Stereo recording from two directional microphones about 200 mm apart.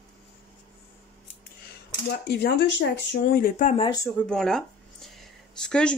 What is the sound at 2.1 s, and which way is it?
Speech, 60° left (ahead or behind).